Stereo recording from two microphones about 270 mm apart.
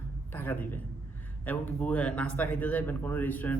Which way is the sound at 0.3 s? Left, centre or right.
Centre.